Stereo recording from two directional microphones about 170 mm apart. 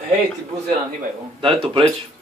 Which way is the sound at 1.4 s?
30° right (ahead or behind).